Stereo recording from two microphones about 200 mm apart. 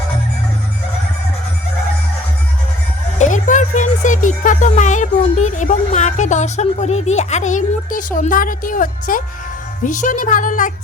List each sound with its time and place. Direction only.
3.2 s speech: 40° left (ahead or behind)